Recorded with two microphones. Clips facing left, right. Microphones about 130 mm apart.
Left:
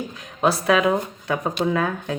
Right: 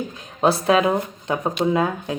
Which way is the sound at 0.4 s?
25° right (ahead or behind).